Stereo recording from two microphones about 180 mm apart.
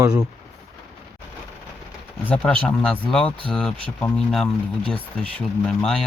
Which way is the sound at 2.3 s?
5° left (ahead or behind).